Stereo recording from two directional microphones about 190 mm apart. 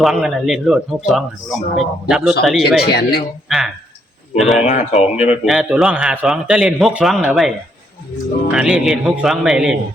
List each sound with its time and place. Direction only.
0.0 s speech: centre (ahead or behind)
2.8 s speech: 55° left (ahead or behind)
4.4 s speech: centre (ahead or behind)
4.6 s speech: 35° left (ahead or behind)
5.5 s speech: 5° right (ahead or behind)
8.5 s speech: 5° right (ahead or behind)